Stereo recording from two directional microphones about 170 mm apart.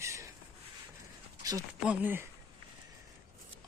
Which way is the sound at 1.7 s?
10° right (ahead or behind).